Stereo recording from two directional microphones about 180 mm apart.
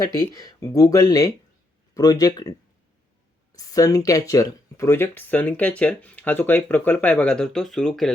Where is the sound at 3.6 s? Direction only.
20° left (ahead or behind); by 8.2 s centre (ahead or behind).